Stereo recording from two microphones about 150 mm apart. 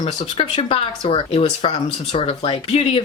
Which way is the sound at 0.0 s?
35° left (ahead or behind).